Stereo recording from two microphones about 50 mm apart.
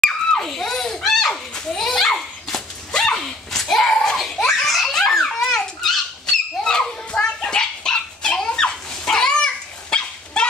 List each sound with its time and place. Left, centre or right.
0.4 s children playing: centre
2.9 s dog: centre
3.5 s giggle: centre
5.0 s dog: centre